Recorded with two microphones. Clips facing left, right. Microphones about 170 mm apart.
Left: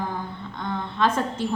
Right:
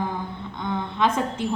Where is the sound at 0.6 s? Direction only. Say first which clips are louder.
Right 1 dB; 15° right (ahead or behind).